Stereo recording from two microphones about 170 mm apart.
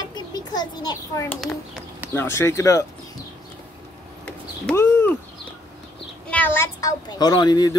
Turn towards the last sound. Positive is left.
turn(degrees=25)  # may be behind; listen again after turning